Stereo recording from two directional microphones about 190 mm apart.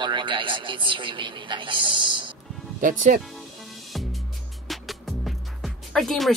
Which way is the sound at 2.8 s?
45° right (ahead or behind).